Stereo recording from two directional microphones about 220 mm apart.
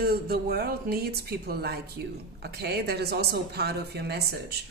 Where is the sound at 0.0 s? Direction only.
45° right (ahead or behind).